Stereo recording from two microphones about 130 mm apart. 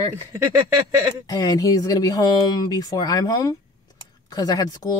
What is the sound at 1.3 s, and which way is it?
Speech, 30° left (ahead or behind).